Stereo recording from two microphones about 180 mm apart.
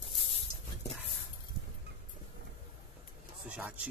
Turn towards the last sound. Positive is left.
turn(degrees=-10)  # may be behind; listen again after turning